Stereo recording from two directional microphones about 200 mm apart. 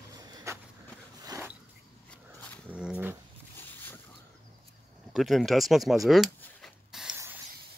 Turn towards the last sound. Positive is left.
turn(degrees=-5)  # may be behind; listen again after turning